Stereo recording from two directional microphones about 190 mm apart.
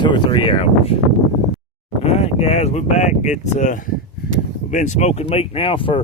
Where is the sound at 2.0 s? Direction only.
30° left (ahead or behind).